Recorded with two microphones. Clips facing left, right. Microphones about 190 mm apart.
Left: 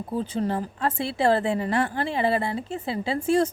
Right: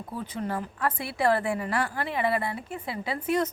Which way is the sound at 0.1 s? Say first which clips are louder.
Left 6 dB; 30° left (ahead or behind).